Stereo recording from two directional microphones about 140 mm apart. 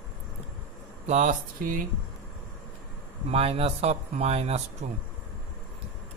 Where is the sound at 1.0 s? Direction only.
60° right (ahead or behind).